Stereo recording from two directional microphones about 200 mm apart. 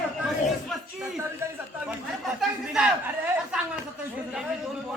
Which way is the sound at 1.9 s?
Centre (ahead or behind).